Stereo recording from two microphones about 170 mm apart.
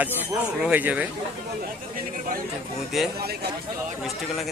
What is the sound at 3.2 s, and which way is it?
Speech, 70° right (ahead or behind).